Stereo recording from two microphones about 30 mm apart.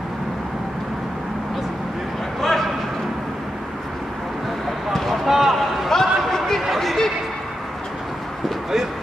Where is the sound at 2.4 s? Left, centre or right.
Centre.